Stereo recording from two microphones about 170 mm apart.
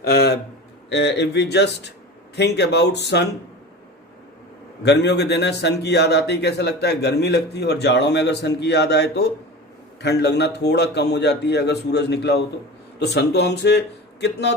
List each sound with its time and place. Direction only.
0.0 s a sound: 75° left (ahead or behind)
0.9 s a man's voice: 90° left
4.8 s a man's voice: 85° left